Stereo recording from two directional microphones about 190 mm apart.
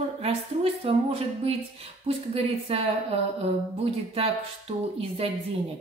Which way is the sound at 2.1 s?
30° right (ahead or behind).